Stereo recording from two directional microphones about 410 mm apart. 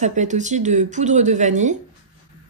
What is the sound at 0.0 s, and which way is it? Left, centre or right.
Speech, centre.